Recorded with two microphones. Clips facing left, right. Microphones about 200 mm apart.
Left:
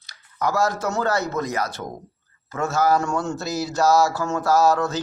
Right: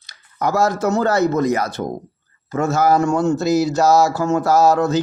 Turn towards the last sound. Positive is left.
turn(degrees=-20)  # may be behind; listen again after turning